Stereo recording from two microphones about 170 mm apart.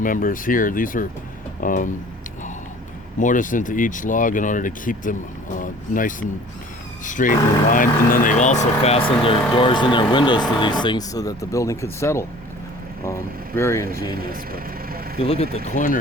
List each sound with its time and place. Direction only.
0.0 s speech: 55° left (ahead or behind)
3.2 s speech: 50° left (ahead or behind); by 13.8 s 15° left (ahead or behind)
13.8 s speech: 60° right (ahead or behind)
15.2 s speech: 35° left (ahead or behind)
15.5 s speech: 45° left (ahead or behind)